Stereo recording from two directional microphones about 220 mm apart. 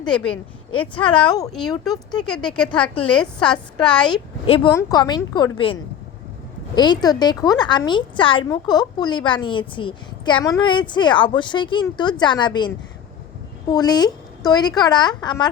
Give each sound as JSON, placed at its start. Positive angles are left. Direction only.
{"t": 0.0, "sound": "a woman's voice", "side_deg": 5}
{"t": 0.8, "sound": "a woman's voice", "side_deg": 20}
{"t": 2.0, "sound": "a woman's voice", "side_deg": 5}
{"t": 4.4, "sound": "a woman's voice", "side_deg": 25}
{"t": 4.7, "sound": "a woman's voice", "side_deg": 15}
{"t": 6.7, "sound": "a woman's voice", "side_deg": 20}